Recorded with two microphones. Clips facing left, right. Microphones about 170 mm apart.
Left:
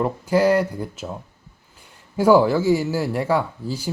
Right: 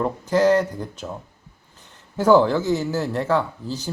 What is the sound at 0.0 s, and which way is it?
Speech, 10° left (ahead or behind).